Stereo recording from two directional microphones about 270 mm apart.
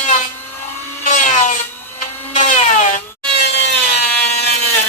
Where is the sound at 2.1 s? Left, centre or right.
Centre.